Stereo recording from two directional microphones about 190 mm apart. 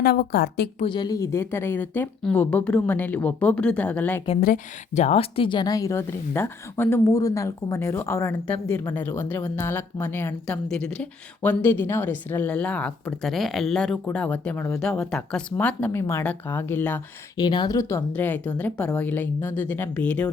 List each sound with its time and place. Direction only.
0.0 s a woman's voice: 55° left (ahead or behind)
0.8 s speech: 25° left (ahead or behind); by 4.2 s 5° left (ahead or behind)
4.4 s speech: 45° left (ahead or behind); by 17.0 s 10° left (ahead or behind)
17.3 s speech: 25° left (ahead or behind); by 20.3 s 5° left (ahead or behind)